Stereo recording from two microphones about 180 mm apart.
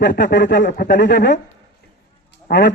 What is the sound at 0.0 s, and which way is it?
A man's voice, 70° left (ahead or behind).